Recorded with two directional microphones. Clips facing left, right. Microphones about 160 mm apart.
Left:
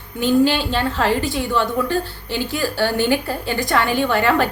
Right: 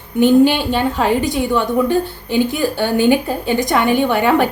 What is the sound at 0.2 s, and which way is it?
A woman's voice, 15° right (ahead or behind).